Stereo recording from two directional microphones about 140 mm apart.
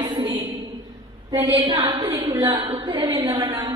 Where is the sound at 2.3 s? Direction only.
25° right (ahead or behind).